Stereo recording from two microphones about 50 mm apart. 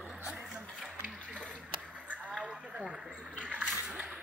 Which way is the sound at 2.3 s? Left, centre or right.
Centre.